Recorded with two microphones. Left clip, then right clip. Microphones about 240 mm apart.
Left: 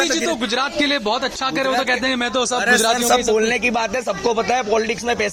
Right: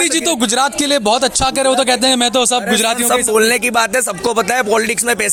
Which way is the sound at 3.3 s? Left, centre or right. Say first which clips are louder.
Right 5 dB; right.